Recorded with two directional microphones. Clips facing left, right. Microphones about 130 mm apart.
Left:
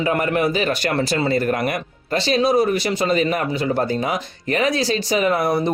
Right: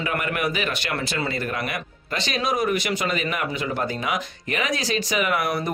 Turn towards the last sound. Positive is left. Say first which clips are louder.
# left 5 dB
turn(degrees=30)  # may be behind; listen again after turning